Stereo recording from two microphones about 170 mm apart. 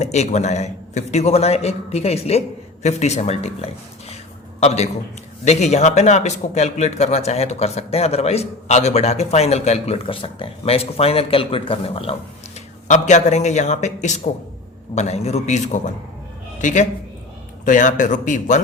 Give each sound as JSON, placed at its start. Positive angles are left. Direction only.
{"t": 0.0, "sound": "speech", "side_deg": 40}
{"t": 12.9, "sound": "a man's voice", "side_deg": 45}